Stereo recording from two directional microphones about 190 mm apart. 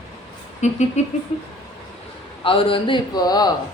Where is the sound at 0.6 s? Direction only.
35° left (ahead or behind).